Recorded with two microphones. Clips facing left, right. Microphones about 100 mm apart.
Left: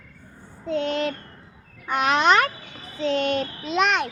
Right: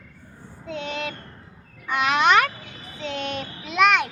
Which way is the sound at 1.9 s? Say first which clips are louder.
Even; 40° left (ahead or behind).